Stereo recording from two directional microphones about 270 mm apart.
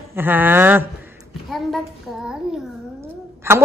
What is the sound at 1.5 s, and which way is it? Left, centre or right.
Child singing, centre.